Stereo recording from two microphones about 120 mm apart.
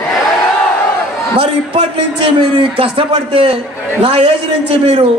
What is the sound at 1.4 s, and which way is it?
A man's voice, 50° right (ahead or behind).